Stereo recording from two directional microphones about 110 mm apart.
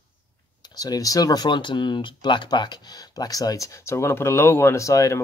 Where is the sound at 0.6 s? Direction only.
35° left (ahead or behind).